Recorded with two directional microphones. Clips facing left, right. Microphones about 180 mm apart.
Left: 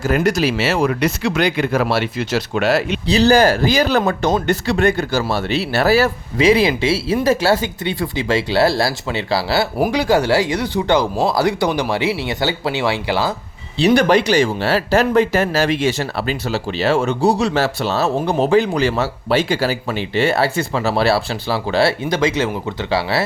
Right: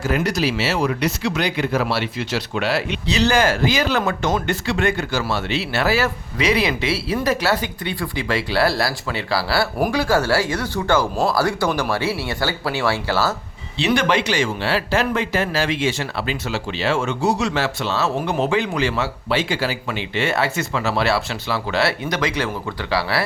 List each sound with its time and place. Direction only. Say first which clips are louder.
0.0 s speech: left 4 dB; 50° left (ahead or behind)
6.3 s speech: left 6 dB; 25° left (ahead or behind)
13.7 s speech: left 6 dB; 35° left (ahead or behind)